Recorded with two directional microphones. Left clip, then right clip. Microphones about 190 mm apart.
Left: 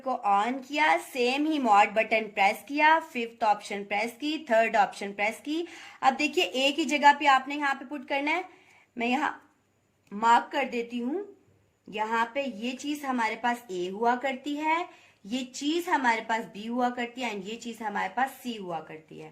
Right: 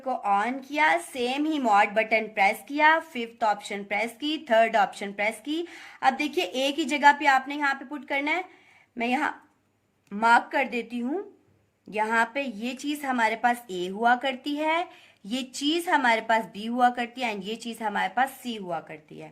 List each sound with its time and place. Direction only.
0.0 s a woman's voice: 10° right (ahead or behind)
10.2 s a woman's voice: 40° right (ahead or behind)